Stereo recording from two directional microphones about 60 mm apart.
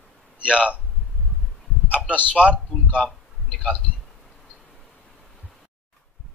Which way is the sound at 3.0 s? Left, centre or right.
Centre.